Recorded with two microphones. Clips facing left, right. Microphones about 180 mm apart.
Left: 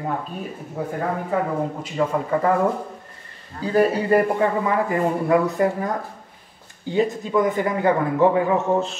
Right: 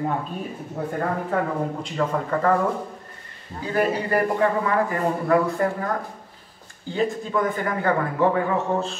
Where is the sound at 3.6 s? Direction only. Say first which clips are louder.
Left 4 dB; 30° left (ahead or behind).